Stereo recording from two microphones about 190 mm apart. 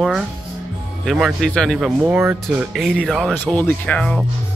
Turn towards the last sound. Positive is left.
turn(degrees=5)  # may be behind; listen again after turning